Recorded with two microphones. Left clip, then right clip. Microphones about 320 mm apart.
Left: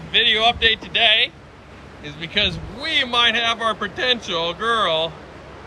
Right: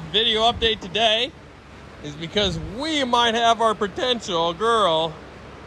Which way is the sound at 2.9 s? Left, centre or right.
Centre.